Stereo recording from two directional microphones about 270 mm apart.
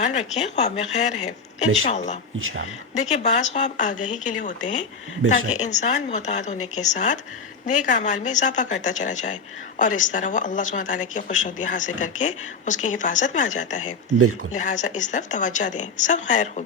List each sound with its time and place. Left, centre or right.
0.0 s speech: left